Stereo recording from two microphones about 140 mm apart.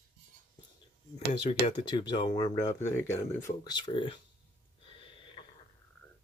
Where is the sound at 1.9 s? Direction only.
35° left (ahead or behind); by 3.2 s 15° left (ahead or behind).